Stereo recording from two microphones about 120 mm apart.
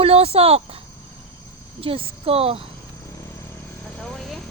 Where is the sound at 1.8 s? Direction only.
50° right (ahead or behind).